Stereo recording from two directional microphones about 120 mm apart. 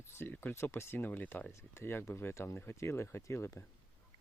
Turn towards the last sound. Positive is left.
turn(degrees=25)  # may be behind; listen again after turning